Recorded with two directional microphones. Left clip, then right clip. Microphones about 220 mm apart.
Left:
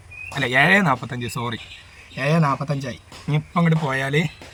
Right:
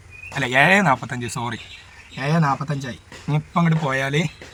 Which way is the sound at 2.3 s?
15° left (ahead or behind).